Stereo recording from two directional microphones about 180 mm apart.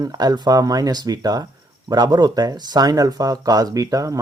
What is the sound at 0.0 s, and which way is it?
Speech, 20° right (ahead or behind).